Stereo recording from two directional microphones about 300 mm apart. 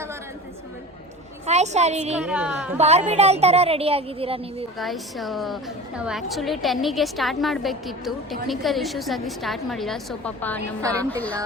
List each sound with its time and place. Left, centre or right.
1.5 s speech: right
2.1 s a woman's voice: centre
2.7 s speech: right
4.8 s a woman's voice: centre
10.8 s a woman's voice: centre